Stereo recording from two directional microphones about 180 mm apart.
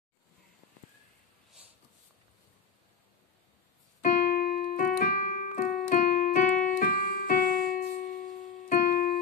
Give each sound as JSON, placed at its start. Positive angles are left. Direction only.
{"t": 4.0, "sound": "keyboard", "side_deg": 50}
{"t": 7.7, "sound": "music", "side_deg": 50}
{"t": 8.6, "sound": "keyboard", "side_deg": 50}